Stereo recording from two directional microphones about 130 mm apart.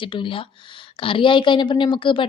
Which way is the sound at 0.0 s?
40° left (ahead or behind).